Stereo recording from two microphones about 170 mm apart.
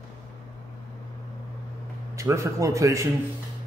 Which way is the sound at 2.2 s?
20° right (ahead or behind).